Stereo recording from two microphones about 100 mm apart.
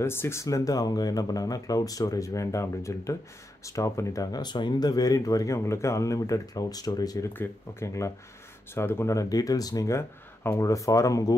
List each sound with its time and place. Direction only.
0.0 s speech: 25° left (ahead or behind)